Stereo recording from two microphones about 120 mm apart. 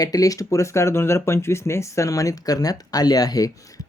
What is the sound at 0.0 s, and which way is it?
Speech, 30° left (ahead or behind).